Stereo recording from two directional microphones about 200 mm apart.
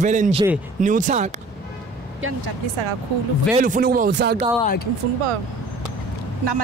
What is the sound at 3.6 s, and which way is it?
Speech, 45° right (ahead or behind).